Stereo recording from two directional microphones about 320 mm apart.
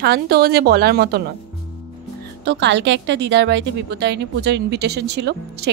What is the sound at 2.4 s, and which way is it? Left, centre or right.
A woman's voice, right.